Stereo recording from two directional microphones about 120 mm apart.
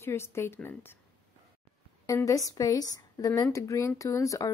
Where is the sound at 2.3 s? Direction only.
30° left (ahead or behind).